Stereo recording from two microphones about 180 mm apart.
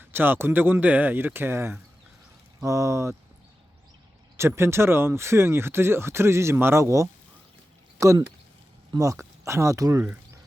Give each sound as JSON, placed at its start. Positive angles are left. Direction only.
{"t": 0.0, "sound": "speech", "side_deg": -10}
{"t": 4.4, "sound": "speech", "side_deg": -15}